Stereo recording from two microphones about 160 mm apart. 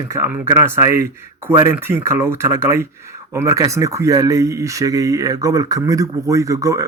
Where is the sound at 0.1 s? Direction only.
15° right (ahead or behind).